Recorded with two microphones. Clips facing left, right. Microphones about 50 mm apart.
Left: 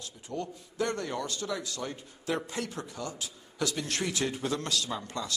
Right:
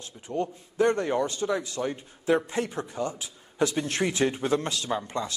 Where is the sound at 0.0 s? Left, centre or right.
Right.